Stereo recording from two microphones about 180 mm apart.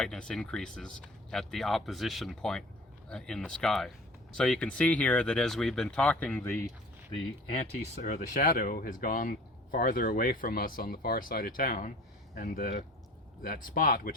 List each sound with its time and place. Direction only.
0.0 s speech: 5° left (ahead or behind)
8.0 s speech: 45° left (ahead or behind)